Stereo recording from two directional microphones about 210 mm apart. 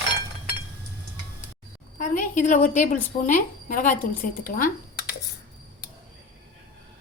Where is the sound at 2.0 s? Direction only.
35° left (ahead or behind).